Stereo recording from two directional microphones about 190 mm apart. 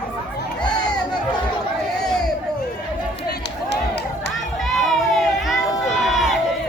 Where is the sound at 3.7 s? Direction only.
65° left (ahead or behind).